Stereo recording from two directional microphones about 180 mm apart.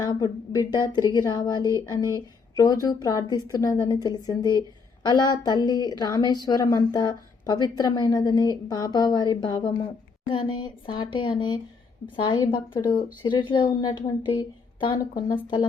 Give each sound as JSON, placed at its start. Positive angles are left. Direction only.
{"t": 0.0, "sound": "a woman's voice", "side_deg": 20}